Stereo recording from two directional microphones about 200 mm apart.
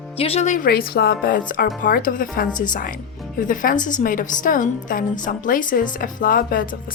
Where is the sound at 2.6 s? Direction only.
40° left (ahead or behind).